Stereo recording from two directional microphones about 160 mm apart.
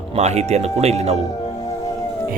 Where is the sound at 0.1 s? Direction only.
45° right (ahead or behind).